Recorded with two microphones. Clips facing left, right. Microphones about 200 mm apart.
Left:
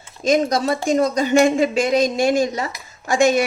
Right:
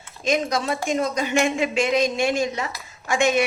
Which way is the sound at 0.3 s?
40° left (ahead or behind).